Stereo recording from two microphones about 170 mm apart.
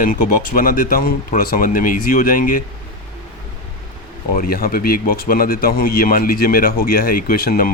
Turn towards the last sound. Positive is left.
turn(degrees=60)  # may be behind; listen again after turning